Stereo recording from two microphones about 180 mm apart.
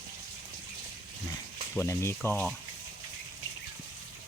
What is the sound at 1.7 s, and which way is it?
Speech, 15° left (ahead or behind).